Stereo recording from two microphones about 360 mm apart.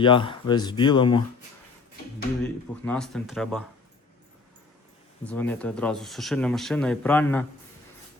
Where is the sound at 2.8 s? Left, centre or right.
Centre.